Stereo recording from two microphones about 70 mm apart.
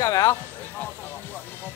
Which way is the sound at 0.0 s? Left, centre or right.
Left.